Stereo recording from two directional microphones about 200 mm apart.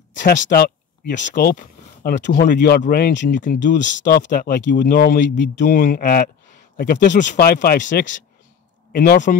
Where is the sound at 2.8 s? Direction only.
45° left (ahead or behind).